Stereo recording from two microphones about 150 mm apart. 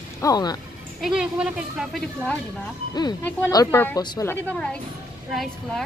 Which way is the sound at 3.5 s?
25° left (ahead or behind).